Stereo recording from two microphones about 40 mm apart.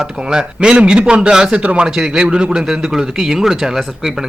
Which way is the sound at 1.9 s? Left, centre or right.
Centre.